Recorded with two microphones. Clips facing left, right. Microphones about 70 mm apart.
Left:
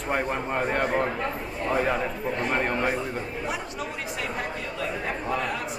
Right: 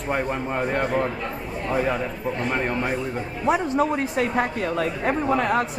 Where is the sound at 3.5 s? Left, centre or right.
Right.